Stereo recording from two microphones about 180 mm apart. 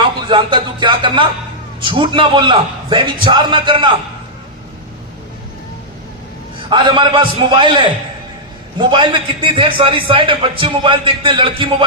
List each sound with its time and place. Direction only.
0.3 s a man's voice: 25° right (ahead or behind)
6.7 s a man's voice: 25° right (ahead or behind)
8.9 s a man's voice: 25° right (ahead or behind)